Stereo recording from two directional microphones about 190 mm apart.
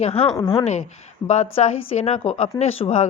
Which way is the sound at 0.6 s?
35° left (ahead or behind).